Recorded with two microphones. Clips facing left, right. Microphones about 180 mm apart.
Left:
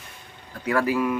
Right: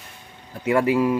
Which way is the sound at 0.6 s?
25° right (ahead or behind).